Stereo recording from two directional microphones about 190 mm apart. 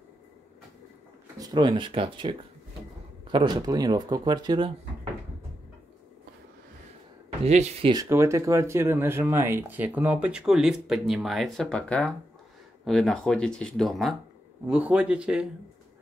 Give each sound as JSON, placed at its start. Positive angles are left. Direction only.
{"t": 1.4, "sound": "speech", "side_deg": -20}
{"t": 7.4, "sound": "speech", "side_deg": -35}
{"t": 7.9, "sound": "speech", "side_deg": -15}